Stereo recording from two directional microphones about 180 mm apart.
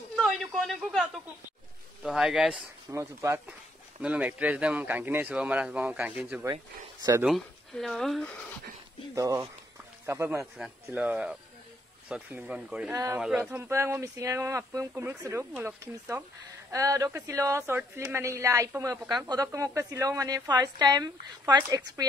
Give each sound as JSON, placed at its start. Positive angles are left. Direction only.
{"t": 0.1, "sound": "a sound", "side_deg": 0}
{"t": 2.0, "sound": "speech", "side_deg": -5}
{"t": 2.9, "sound": "speech", "side_deg": -15}
{"t": 6.5, "sound": "a woman's voice", "side_deg": -20}
{"t": 7.2, "sound": "speech", "side_deg": 0}
{"t": 9.1, "sound": "speech", "side_deg": -15}
{"t": 12.9, "sound": "speech", "side_deg": -15}
{"t": 13.2, "sound": "a woman's voice", "side_deg": -5}